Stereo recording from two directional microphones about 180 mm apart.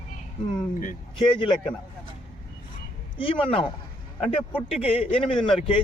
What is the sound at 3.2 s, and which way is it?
Speech, 30° left (ahead or behind).